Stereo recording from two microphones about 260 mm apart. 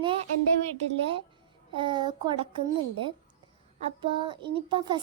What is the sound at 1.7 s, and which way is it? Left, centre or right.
Speech, centre.